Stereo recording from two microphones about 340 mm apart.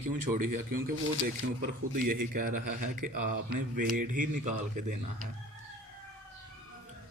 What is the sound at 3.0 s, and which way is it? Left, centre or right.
Speech, right.